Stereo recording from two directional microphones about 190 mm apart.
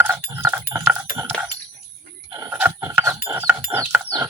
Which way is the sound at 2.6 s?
10° right (ahead or behind).